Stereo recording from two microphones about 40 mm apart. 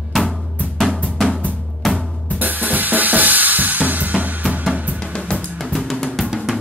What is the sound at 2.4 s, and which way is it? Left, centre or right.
Drum kit, right.